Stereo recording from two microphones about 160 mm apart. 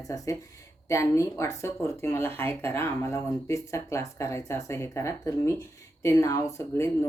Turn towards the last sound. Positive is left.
turn(degrees=20)  # may be behind; listen again after turning